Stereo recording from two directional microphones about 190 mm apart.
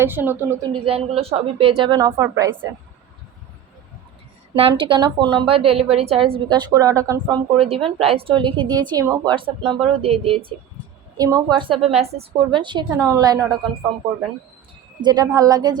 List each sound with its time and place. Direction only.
0.0 s speech: 10° right (ahead or behind)
0.7 s speech: 30° right (ahead or behind)
4.5 s speech: 30° right (ahead or behind)
6.5 s speech: 20° right (ahead or behind)
15.0 s speech: 20° right (ahead or behind)